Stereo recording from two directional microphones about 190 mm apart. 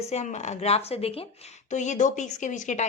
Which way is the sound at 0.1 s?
35° left (ahead or behind).